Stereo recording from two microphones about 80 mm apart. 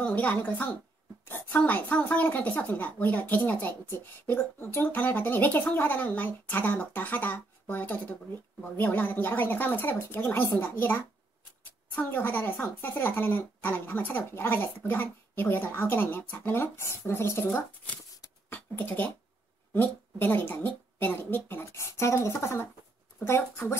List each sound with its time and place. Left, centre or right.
0.0 s speech: centre
21.6 s speech: left